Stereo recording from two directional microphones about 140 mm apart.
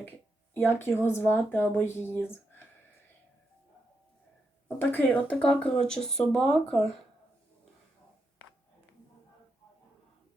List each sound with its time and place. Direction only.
0.5 s speech: 15° left (ahead or behind)
4.8 s speech: 15° left (ahead or behind)